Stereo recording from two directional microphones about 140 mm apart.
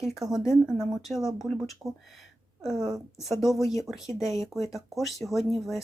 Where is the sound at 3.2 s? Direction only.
Centre (ahead or behind).